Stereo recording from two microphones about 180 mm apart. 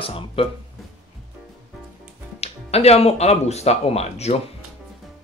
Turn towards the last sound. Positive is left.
turn(degrees=35)  # may be behind; listen again after turning